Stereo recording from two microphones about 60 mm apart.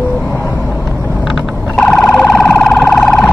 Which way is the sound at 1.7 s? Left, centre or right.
Centre.